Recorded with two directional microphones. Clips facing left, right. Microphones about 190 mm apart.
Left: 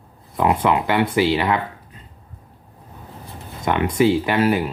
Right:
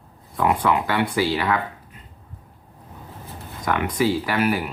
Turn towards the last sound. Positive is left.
turn(degrees=25)  # may be behind; listen again after turning